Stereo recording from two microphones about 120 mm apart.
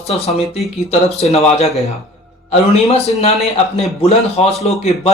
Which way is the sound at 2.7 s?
60° left (ahead or behind).